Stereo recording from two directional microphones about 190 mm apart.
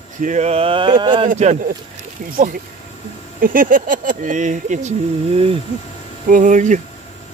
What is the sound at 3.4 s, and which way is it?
Speech, 45° right (ahead or behind).